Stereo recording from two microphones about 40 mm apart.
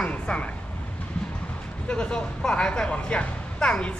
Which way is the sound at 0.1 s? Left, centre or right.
Left.